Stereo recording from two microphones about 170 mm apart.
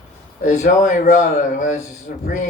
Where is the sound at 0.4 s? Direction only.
45° left (ahead or behind).